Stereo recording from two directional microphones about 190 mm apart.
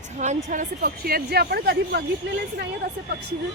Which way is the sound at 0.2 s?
40° right (ahead or behind).